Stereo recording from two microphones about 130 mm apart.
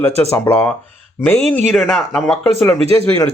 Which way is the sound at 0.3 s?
20° left (ahead or behind).